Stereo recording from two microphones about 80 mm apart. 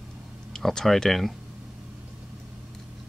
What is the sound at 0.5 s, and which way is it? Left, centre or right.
Speech, centre.